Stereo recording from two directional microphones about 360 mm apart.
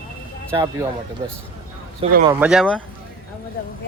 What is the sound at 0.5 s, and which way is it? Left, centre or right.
Speech, centre.